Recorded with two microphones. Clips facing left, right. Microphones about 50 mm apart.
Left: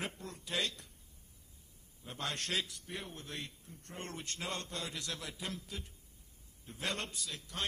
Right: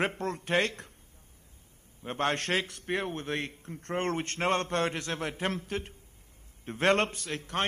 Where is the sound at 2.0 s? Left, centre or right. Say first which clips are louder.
Right 11 dB; right.